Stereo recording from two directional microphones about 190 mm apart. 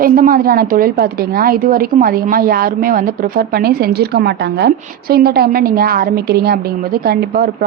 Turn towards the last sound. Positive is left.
turn(degrees=-55)  # may be behind; listen again after turning